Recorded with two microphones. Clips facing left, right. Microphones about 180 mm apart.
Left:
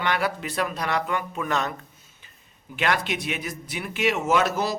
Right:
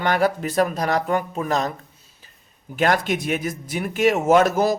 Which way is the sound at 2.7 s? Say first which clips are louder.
Right 5 dB; 45° right (ahead or behind).